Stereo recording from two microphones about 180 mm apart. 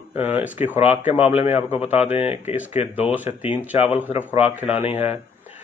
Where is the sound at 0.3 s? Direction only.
10° right (ahead or behind).